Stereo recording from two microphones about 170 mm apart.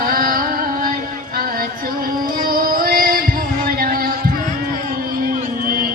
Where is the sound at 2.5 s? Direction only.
55° right (ahead or behind).